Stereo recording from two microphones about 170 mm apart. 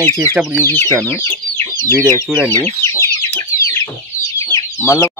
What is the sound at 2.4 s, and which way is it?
Speech, 15° left (ahead or behind).